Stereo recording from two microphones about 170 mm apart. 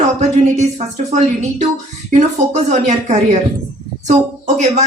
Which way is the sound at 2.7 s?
45° right (ahead or behind).